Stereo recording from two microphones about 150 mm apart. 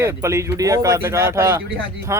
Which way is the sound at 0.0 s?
20° right (ahead or behind).